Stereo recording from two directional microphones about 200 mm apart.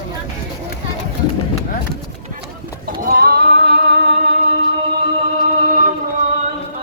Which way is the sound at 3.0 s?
50° right (ahead or behind).